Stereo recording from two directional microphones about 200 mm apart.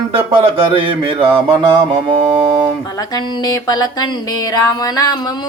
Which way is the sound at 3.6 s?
20° left (ahead or behind).